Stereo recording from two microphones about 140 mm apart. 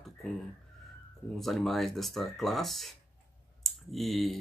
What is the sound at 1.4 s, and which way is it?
Speech, centre (ahead or behind).